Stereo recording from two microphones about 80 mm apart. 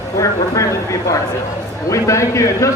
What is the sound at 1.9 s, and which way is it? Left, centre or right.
Speech, left.